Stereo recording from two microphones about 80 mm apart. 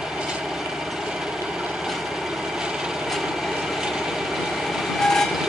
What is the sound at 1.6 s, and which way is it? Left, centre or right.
Vehicle, centre.